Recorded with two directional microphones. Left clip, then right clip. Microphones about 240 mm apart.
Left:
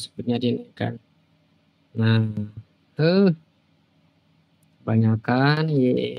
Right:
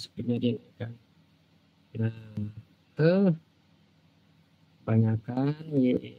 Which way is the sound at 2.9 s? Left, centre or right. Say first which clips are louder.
Left 5 dB; centre.